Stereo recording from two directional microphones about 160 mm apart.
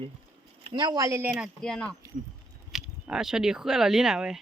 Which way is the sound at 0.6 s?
30° right (ahead or behind).